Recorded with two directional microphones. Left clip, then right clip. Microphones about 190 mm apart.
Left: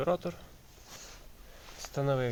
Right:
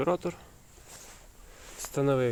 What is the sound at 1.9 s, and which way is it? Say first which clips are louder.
Speech: right 4 dB; 50° right (ahead or behind).